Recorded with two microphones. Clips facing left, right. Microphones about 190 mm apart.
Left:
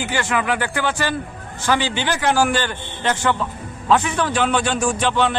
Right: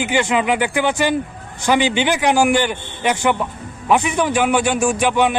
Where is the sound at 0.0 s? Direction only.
15° right (ahead or behind).